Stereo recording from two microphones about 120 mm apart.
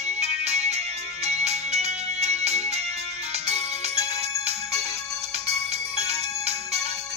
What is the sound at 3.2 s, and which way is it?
Ringtone, 60° right (ahead or behind).